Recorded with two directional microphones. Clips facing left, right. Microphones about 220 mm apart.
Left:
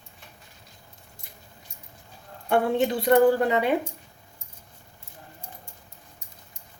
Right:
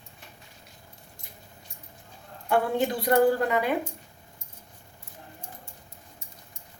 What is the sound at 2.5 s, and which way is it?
Speech, 25° left (ahead or behind).